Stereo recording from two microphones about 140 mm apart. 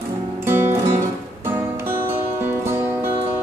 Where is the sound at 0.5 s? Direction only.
15° right (ahead or behind).